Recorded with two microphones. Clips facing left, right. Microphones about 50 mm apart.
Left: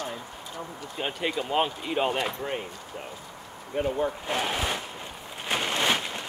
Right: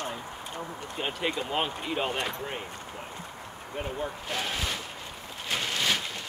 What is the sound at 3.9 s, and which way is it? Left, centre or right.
Speech, left.